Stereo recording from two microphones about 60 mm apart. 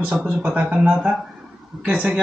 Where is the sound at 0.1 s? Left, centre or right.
Right.